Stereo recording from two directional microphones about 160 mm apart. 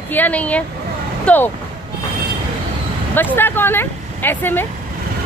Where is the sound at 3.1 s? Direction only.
10° left (ahead or behind).